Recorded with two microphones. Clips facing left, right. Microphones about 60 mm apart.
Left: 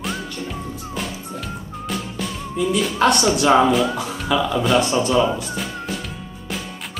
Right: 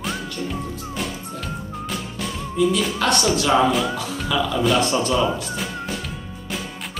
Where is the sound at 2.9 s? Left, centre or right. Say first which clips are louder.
Left 3 dB; left.